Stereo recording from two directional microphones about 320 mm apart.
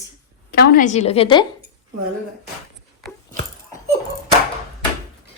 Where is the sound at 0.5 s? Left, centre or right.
Left.